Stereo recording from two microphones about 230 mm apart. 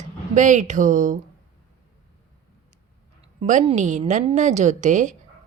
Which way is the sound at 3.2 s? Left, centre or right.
Right.